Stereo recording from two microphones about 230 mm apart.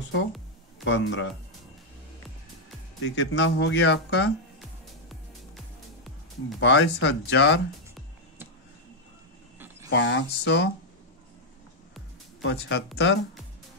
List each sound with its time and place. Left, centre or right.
0.8 s speech: left
3.0 s speech: left
6.6 s speech: left
9.8 s speech: left
12.4 s speech: left